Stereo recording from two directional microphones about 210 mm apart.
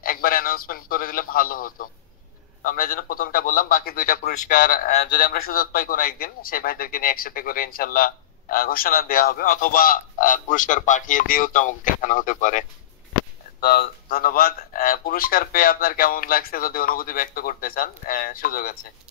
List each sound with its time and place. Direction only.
0.0 s a man's voice: 45° left (ahead or behind)